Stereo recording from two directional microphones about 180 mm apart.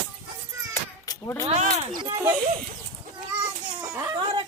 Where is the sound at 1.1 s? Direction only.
15° left (ahead or behind).